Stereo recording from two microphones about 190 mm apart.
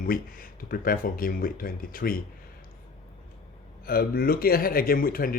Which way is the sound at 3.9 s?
50° left (ahead or behind).